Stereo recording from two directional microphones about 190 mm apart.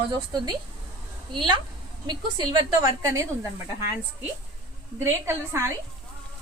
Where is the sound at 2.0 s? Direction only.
25° right (ahead or behind).